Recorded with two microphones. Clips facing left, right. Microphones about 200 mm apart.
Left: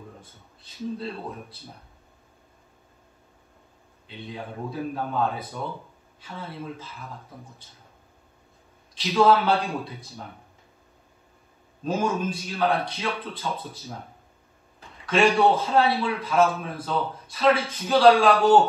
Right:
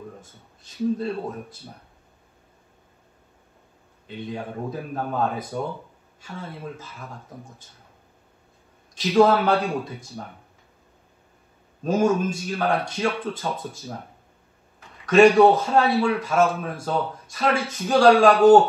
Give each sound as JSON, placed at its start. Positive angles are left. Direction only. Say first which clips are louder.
{"t": 0.2, "sound": "speech", "louder": "right 1 dB", "side_deg": -45}
{"t": 4.3, "sound": "speech", "louder": "right 3 dB", "side_deg": -45}
{"t": 8.9, "sound": "a man's voice", "louder": "right 2 dB", "side_deg": -50}
{"t": 11.8, "sound": "speech", "louder": "right 5 dB", "side_deg": -45}
{"t": 15.0, "sound": "speech", "louder": "right 6 dB", "side_deg": -50}